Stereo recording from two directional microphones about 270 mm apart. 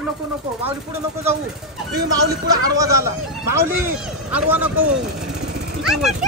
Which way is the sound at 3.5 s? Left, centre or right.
Centre.